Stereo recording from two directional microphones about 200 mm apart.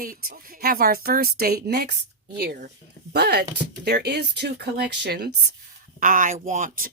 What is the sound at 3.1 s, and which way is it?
Speech, 50° right (ahead or behind).